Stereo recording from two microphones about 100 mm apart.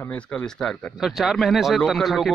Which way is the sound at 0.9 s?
5° right (ahead or behind).